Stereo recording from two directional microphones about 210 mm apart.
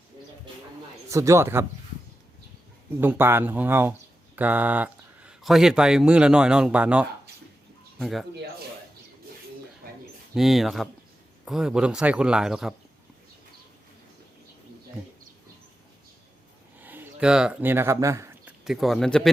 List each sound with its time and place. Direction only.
1.1 s speech: 15° right (ahead or behind)
3.0 s speech: 10° right (ahead or behind)
9.8 s a sound: 45° right (ahead or behind)
10.3 s speech: centre (ahead or behind)
16.7 s a sound: 10° right (ahead or behind)
18.6 s speech: centre (ahead or behind)